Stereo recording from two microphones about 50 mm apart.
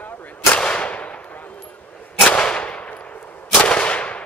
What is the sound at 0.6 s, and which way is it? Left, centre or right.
Gunshot, centre.